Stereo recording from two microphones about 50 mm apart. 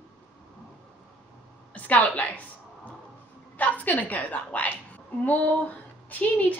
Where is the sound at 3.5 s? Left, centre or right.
Left.